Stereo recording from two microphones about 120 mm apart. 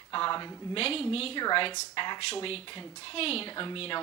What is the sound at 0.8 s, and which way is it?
Speech, 55° left (ahead or behind).